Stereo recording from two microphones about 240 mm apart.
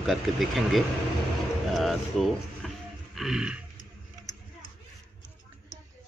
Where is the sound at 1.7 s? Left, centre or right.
Centre.